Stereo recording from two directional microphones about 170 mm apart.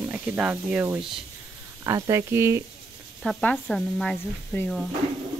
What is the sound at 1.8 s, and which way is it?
Speech, 15° right (ahead or behind).